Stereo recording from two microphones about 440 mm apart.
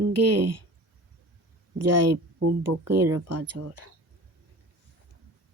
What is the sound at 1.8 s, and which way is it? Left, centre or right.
Speech, right.